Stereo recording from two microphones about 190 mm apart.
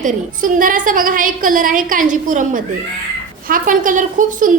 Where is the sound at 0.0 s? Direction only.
45° right (ahead or behind).